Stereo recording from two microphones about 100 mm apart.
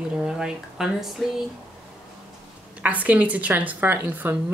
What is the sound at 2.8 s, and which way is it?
A woman's voice, 15° right (ahead or behind).